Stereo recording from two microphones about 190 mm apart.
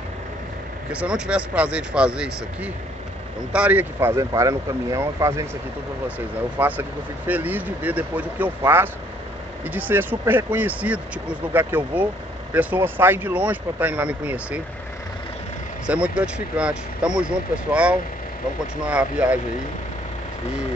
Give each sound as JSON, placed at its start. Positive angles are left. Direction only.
{"t": 0.9, "sound": "speech", "side_deg": -5}
{"t": 15.9, "sound": "speech", "side_deg": -5}